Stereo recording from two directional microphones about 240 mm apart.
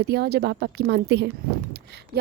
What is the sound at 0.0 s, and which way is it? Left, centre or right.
A woman's voice, right.